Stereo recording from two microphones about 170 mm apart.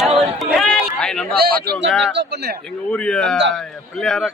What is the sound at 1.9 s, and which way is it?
Speech, centre (ahead or behind).